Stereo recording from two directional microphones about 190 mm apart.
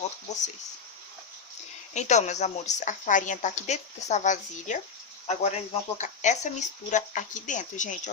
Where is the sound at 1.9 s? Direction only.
40° left (ahead or behind).